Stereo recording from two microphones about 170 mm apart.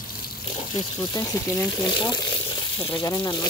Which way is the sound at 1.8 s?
25° left (ahead or behind).